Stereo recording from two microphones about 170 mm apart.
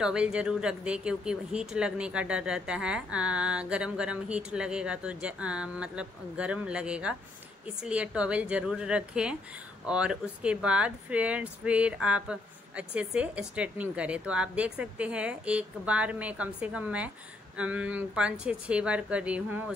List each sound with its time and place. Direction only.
0.0 s speech: 5° right (ahead or behind)